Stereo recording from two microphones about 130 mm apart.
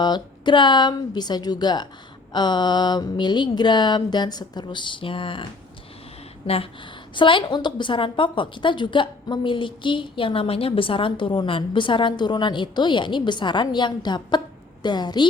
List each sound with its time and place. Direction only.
0.0 s a woman's voice: 35° left (ahead or behind)